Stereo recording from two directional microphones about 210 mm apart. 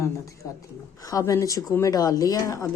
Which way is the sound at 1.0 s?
15° left (ahead or behind).